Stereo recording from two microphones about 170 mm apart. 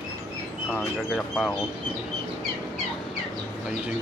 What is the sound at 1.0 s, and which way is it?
Speech, 5° left (ahead or behind).